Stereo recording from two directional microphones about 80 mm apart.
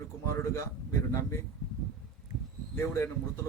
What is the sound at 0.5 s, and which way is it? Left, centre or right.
Speech, left.